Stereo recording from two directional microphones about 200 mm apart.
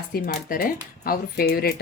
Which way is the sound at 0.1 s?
45° left (ahead or behind).